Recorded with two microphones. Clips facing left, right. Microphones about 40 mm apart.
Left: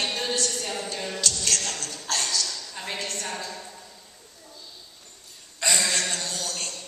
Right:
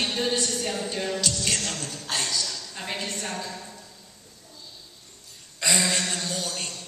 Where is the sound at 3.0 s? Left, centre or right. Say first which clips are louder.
Even; centre.